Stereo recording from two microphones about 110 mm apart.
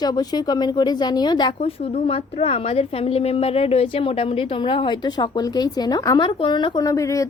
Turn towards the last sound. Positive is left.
turn(degrees=30)  # may be behind; listen again after turning